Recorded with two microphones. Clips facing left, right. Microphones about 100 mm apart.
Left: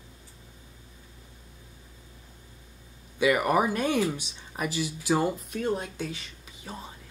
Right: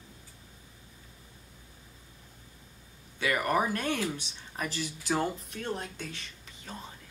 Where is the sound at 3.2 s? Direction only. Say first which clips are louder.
Left 5 dB; 15° left (ahead or behind).